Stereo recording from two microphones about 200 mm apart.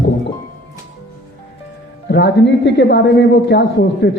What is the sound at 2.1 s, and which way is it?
A man's voice, 60° left (ahead or behind).